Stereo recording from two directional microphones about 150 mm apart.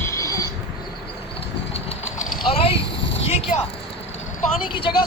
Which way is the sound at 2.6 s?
40° left (ahead or behind).